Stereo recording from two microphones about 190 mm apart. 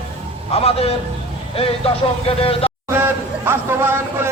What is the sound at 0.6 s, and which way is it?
A man's voice, 30° left (ahead or behind).